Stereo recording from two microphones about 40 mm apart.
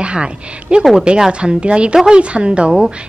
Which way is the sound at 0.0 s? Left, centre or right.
Right.